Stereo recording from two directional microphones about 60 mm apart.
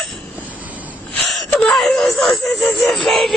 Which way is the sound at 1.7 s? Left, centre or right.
Centre.